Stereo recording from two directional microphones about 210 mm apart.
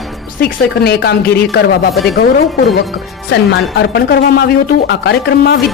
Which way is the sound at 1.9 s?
Centre (ahead or behind).